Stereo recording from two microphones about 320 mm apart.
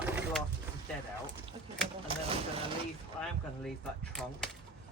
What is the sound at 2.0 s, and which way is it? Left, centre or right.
Speech, centre.